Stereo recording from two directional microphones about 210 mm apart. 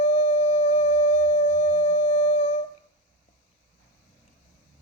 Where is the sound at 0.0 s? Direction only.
30° left (ahead or behind).